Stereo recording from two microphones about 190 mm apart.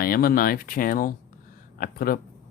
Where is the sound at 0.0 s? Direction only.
50° left (ahead or behind).